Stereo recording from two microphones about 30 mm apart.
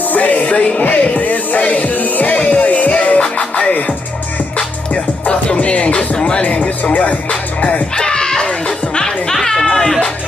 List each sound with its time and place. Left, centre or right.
0.1 s music: left
1.6 s music: left
2.3 s music: left
3.2 s music: left
6.1 s speech: left
7.0 s music: left
7.9 s music: left
9.3 s chatter: centre